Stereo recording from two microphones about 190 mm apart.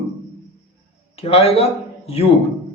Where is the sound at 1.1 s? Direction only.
30° left (ahead or behind).